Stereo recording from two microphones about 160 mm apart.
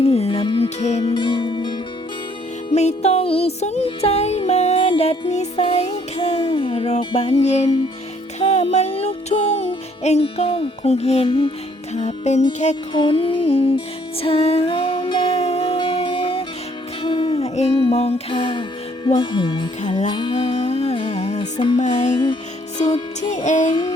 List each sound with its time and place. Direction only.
0.0 s music: 40° left (ahead or behind)
1.0 s music: 30° left (ahead or behind)
2.7 s music: 40° left (ahead or behind)
12.9 s music: 30° left (ahead or behind)
19.0 s speech: 25° left (ahead or behind)
20.3 s music: 40° left (ahead or behind)
22.9 s speech: 30° left (ahead or behind)
23.3 s music: 50° left (ahead or behind)